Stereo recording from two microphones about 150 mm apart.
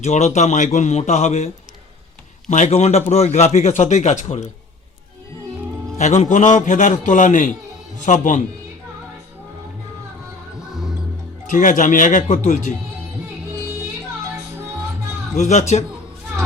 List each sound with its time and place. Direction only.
0.0 s speech: 45° left (ahead or behind)
2.5 s speech: 45° left (ahead or behind)
6.0 s a man's voice: 50° left (ahead or behind)
11.4 s a man's voice: 60° left (ahead or behind)
15.4 s speech: 50° left (ahead or behind)